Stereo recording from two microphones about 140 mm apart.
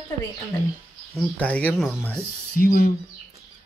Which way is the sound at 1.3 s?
10° left (ahead or behind).